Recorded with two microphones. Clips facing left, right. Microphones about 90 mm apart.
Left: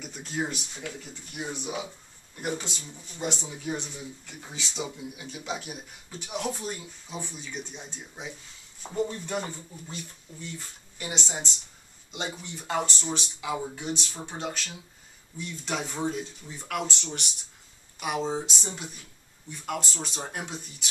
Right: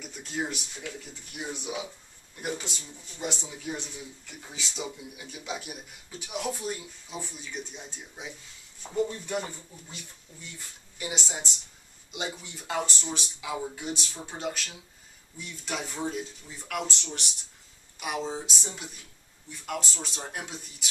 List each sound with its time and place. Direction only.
0.0 s speech: centre (ahead or behind)
12.4 s speech: centre (ahead or behind)